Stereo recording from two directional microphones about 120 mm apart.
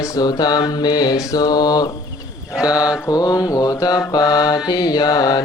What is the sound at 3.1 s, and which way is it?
Mantra, 30° left (ahead or behind).